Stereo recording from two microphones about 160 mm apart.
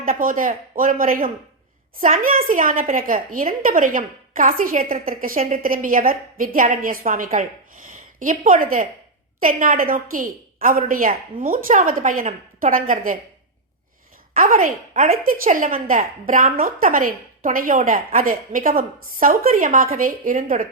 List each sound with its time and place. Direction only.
0.0 s a woman's voice: 60° right (ahead or behind)
14.3 s a woman's voice: 60° right (ahead or behind)